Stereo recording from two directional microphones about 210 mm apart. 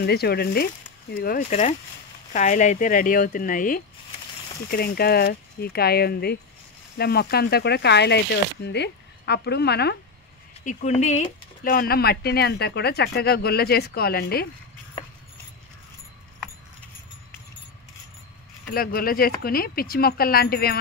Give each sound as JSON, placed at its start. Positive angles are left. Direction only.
{"t": 0.0, "sound": "speech", "side_deg": 50}
{"t": 1.5, "sound": "speech", "side_deg": 35}
{"t": 10.6, "sound": "speech", "side_deg": 35}
{"t": 18.7, "sound": "speech", "side_deg": 45}